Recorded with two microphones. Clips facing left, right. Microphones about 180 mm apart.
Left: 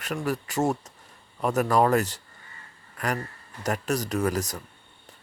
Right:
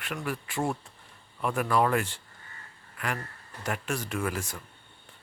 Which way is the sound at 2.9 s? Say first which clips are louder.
Left 5 dB; 40° left (ahead or behind).